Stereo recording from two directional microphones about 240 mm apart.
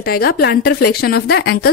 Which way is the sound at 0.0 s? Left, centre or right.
Left.